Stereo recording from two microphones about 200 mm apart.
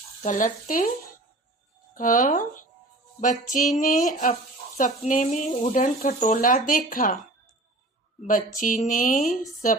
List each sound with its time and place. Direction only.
0.2 s speech: 40° left (ahead or behind)
2.0 s speech: 40° left (ahead or behind)
8.3 s speech: 45° left (ahead or behind)